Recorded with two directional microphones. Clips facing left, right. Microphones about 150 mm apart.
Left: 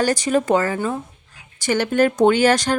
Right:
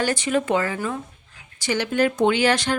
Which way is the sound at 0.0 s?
40° left (ahead or behind).